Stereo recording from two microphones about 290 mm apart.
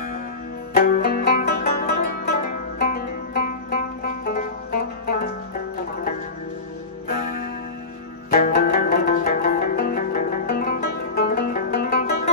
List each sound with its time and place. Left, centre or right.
0.7 s music: left
7.1 s music: left